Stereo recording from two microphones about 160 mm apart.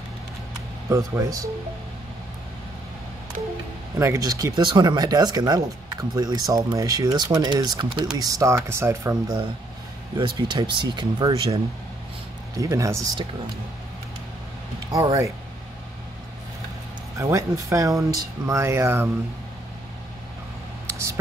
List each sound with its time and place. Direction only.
0.8 s speech: 20° right (ahead or behind)
4.0 s speech: 20° right (ahead or behind)
10.1 s speech: 30° right (ahead or behind)
14.9 s speech: 25° right (ahead or behind)
17.2 s speech: 20° right (ahead or behind)